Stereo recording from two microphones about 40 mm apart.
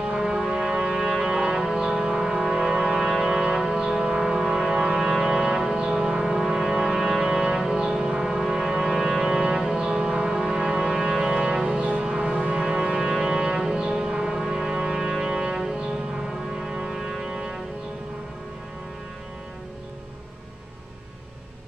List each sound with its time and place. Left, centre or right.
0.2 s music: centre
1.3 s music: right
1.8 s foghorn: centre
3.0 s music: centre
3.3 s music: centre
4.7 s music: right
12.0 s vehicle: right
12.4 s foghorn: right
13.6 s music: centre